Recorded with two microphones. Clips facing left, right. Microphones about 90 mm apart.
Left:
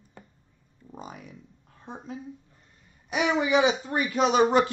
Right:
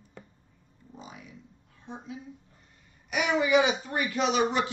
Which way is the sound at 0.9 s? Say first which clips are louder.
Left 4 dB; 50° left (ahead or behind).